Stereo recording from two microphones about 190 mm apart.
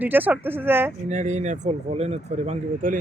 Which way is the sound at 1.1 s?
40° right (ahead or behind).